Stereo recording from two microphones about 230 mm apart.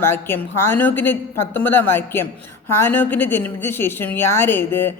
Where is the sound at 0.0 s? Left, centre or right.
Centre.